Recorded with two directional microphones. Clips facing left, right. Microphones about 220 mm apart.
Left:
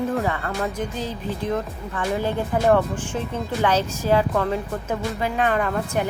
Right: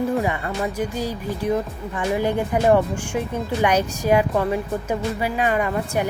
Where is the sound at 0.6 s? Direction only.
Centre (ahead or behind).